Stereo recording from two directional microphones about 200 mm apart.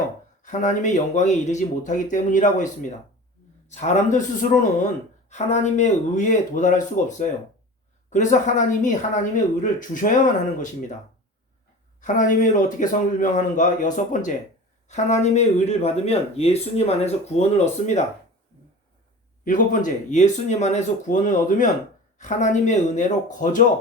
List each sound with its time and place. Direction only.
0.4 s speech: 40° left (ahead or behind)
3.7 s speech: 35° left (ahead or behind)
11.9 s speech: 40° left (ahead or behind)
19.5 s speech: 40° left (ahead or behind)